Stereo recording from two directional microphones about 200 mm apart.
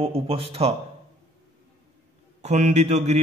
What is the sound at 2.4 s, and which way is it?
Speech, 35° right (ahead or behind).